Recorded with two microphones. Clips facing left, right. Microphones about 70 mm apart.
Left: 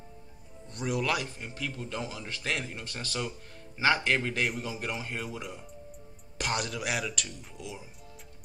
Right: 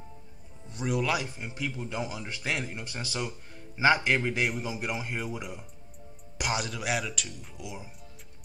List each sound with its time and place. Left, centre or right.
0.7 s a man's voice: centre